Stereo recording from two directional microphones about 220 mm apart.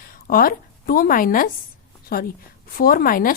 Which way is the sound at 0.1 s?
40° left (ahead or behind).